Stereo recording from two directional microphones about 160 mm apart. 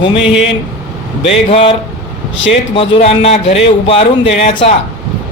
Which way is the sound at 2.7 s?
35° left (ahead or behind).